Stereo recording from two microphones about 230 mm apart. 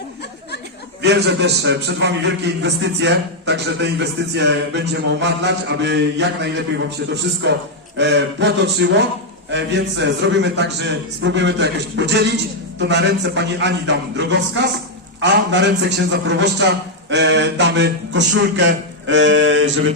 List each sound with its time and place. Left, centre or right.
1.0 s a man's voice: right